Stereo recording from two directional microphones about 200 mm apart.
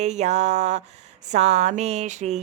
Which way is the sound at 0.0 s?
35° right (ahead or behind).